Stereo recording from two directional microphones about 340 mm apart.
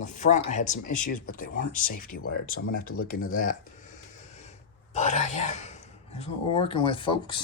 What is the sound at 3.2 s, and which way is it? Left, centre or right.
Speech, left.